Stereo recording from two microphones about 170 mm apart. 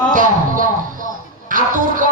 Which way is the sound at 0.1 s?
50° right (ahead or behind).